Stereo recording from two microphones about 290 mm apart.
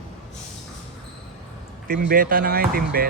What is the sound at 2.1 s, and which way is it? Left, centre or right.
Speech, right.